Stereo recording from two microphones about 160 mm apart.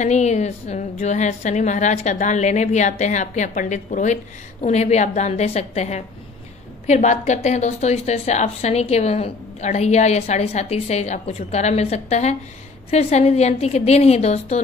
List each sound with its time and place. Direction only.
0.0 s a woman's voice: 45° left (ahead or behind)